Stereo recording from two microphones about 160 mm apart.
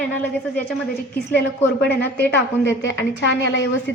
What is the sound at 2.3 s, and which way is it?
Speech, 90° left.